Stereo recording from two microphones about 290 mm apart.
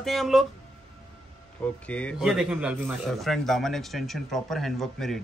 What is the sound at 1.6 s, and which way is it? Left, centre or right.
Speech, centre.